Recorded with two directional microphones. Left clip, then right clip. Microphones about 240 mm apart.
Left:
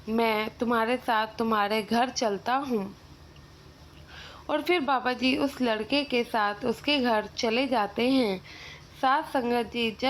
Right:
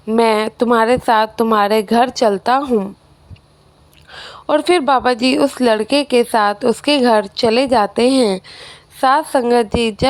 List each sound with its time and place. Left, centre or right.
0.1 s a woman's voice: right
4.1 s a woman's voice: right